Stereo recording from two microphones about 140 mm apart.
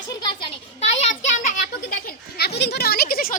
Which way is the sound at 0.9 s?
55° left (ahead or behind).